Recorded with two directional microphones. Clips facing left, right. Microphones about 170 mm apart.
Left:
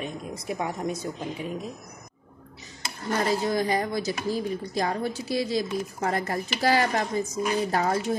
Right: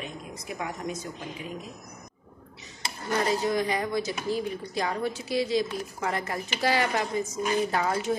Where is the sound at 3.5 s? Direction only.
40° left (ahead or behind).